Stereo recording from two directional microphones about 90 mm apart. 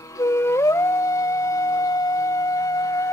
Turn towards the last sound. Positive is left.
turn(degrees=40)  # may be behind; listen again after turning